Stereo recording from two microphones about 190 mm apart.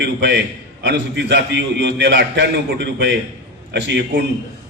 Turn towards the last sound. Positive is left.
turn(degrees=-65)  # may be behind; listen again after turning